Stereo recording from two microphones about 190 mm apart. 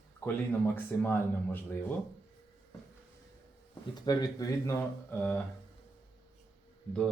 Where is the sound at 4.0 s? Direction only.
20° left (ahead or behind).